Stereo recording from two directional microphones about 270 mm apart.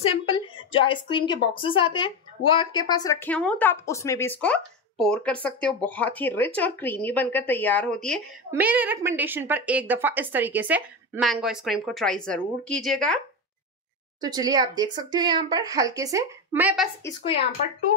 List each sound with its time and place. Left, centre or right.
0.7 s a woman's voice: centre
14.2 s speech: centre
17.0 s speech: centre